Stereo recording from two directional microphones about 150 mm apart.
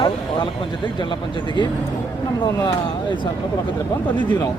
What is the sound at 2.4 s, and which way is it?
Speech, 30° left (ahead or behind).